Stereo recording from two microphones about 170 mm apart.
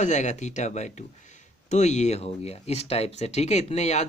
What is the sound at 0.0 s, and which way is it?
Speech, 45° left (ahead or behind).